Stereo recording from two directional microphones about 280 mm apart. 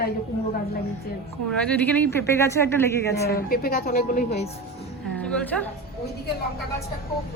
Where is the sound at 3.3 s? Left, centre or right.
Left.